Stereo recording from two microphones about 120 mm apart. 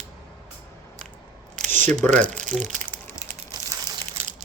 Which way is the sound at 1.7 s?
15° left (ahead or behind).